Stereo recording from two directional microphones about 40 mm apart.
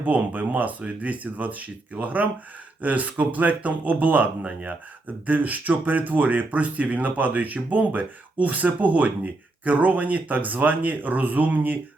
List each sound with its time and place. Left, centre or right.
0.0 s speech: right